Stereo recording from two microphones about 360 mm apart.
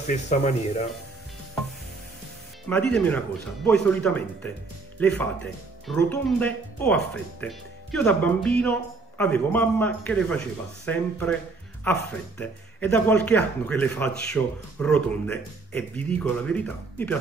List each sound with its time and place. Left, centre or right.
0.0 s speech: centre
2.7 s speech: centre